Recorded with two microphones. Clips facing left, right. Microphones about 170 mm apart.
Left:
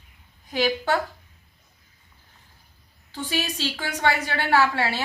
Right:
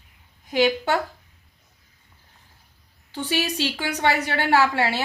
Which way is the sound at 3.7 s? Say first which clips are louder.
Even; 20° right (ahead or behind).